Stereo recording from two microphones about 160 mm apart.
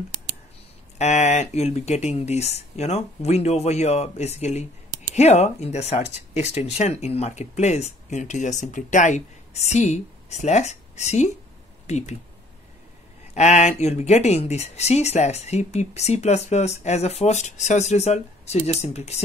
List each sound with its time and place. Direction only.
0.9 s speech: 45° left (ahead or behind)
13.3 s speech: 45° left (ahead or behind)